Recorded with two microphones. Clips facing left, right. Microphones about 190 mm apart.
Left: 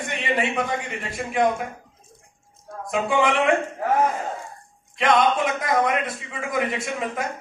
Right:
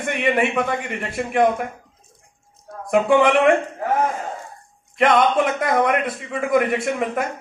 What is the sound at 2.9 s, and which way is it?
Speech, 50° right (ahead or behind).